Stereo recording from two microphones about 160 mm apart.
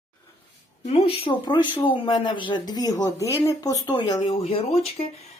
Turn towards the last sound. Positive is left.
turn(degrees=40)  # may be behind; listen again after turning